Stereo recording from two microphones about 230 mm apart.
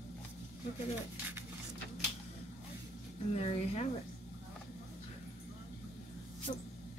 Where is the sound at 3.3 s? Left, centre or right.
Left.